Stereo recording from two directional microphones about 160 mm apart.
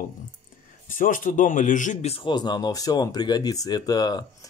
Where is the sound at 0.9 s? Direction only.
60° left (ahead or behind); by 4.5 s 25° left (ahead or behind).